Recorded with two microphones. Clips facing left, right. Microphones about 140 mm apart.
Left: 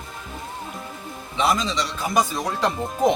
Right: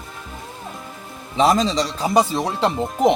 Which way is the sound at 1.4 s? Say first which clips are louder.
Right 5 dB; 40° right (ahead or behind).